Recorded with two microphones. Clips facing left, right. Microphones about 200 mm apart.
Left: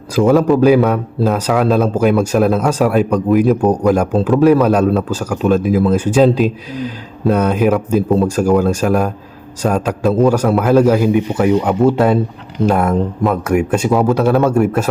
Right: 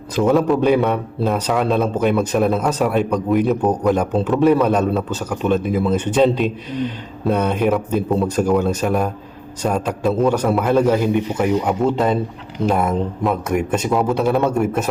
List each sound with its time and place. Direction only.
0.2 s a man's voice: centre (ahead or behind)
13.2 s a man's voice: centre (ahead or behind)